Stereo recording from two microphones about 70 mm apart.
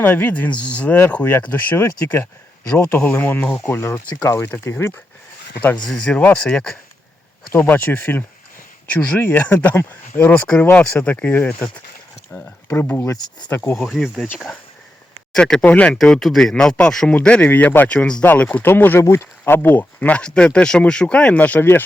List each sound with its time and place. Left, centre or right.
0.0 s speech: left
2.9 s speech: left
5.9 s speech: centre
7.5 s speech: left
13.7 s speech: centre
15.6 s speech: centre
16.2 s speech: centre
17.2 s speech: centre
18.2 s speech: left
21.6 s speech: left